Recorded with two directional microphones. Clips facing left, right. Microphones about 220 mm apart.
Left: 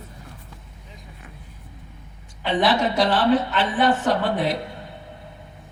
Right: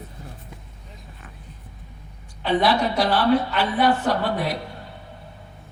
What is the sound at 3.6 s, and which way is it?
Speech, 20° left (ahead or behind).